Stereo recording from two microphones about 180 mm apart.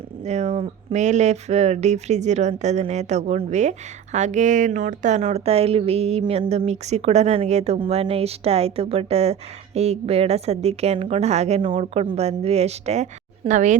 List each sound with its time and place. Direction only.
0.3 s speech: 35° right (ahead or behind)